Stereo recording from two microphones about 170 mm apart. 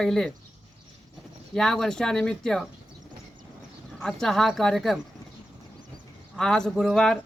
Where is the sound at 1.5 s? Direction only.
Centre (ahead or behind).